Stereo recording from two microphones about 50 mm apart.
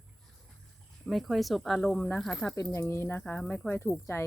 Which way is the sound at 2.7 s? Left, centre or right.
Left.